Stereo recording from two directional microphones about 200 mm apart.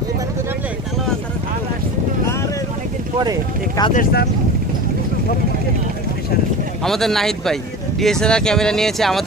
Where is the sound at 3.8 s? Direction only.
15° left (ahead or behind).